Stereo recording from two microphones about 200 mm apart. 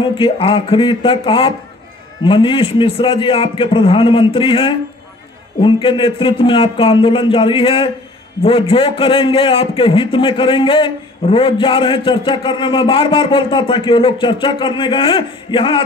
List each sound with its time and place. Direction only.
0.0 s a man's voice: 25° left (ahead or behind)